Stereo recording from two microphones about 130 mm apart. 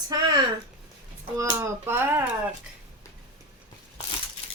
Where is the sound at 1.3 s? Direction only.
20° right (ahead or behind).